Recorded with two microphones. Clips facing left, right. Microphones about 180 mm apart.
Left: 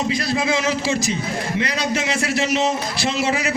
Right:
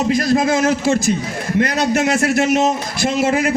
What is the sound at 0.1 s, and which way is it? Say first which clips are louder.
A man's voice: right 6 dB; 45° right (ahead or behind).